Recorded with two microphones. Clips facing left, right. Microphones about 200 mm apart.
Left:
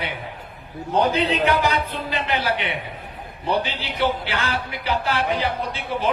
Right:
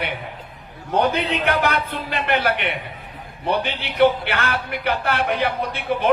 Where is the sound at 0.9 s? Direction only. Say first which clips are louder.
Even; 60° right (ahead or behind).